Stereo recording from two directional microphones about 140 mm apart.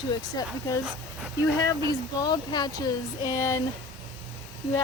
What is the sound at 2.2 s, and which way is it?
Speech, 30° left (ahead or behind).